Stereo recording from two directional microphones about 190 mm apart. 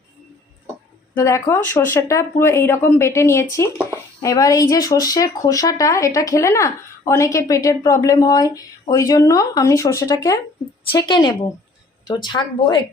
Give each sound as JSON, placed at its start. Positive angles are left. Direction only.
{"t": 1.1, "sound": "speech", "side_deg": 15}